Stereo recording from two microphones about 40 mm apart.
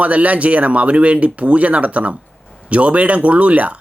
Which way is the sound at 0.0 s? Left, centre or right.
Right.